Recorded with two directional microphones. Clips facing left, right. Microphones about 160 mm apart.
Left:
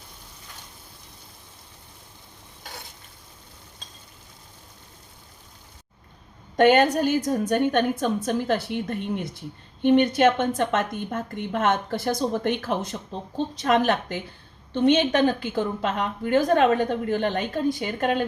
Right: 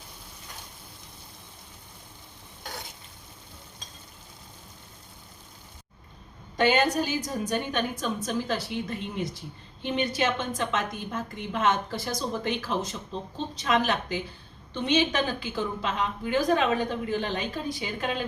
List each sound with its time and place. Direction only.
6.6 s a woman's voice: 55° left (ahead or behind)